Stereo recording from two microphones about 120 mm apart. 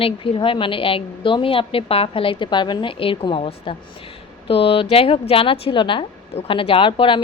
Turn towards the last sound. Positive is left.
turn(degrees=45)  # may be behind; listen again after turning